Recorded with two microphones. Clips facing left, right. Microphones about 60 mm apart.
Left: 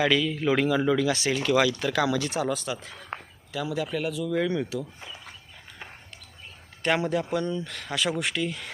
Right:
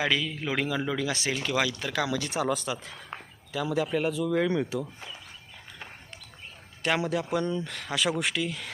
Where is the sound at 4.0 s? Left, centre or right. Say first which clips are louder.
Right 1 dB; right.